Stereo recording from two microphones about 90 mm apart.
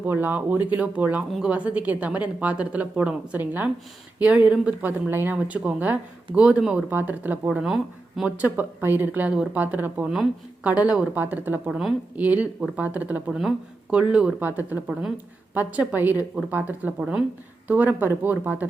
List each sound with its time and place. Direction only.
0.0 s speech: 20° right (ahead or behind)
1.3 s speech: 5° right (ahead or behind)
1.5 s speech: 15° right (ahead or behind)
7.6 s speech: 5° right (ahead or behind)
8.4 s speech: 20° right (ahead or behind)
10.1 s speech: 5° right (ahead or behind)